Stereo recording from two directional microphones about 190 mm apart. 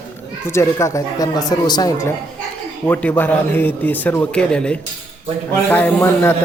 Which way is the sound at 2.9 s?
10° left (ahead or behind).